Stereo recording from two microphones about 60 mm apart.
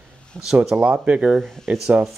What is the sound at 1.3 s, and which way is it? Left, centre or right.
Speech, centre.